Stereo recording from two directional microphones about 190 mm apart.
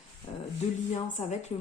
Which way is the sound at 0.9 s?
40° left (ahead or behind).